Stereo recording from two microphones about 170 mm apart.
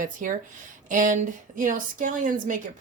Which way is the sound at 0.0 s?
50° right (ahead or behind).